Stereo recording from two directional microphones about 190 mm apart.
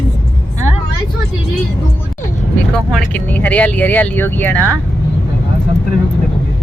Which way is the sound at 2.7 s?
Centre (ahead or behind).